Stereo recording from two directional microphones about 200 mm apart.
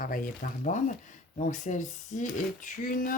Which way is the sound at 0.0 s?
45° left (ahead or behind).